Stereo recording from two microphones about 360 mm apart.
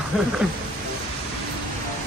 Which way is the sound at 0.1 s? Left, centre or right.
Centre.